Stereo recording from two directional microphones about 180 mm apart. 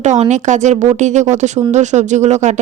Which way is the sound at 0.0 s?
40° right (ahead or behind).